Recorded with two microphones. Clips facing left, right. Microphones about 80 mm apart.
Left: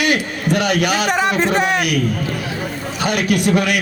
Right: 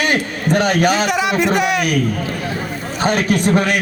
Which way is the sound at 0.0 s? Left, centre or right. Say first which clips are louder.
Even; right.